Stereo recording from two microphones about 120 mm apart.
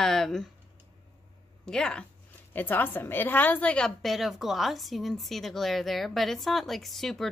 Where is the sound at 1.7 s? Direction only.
5° left (ahead or behind).